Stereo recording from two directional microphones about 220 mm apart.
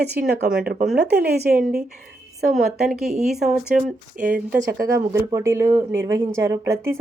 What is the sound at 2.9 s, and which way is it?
Speech, centre (ahead or behind).